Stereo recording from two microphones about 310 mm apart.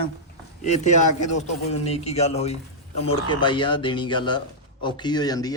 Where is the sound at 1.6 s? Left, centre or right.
Centre.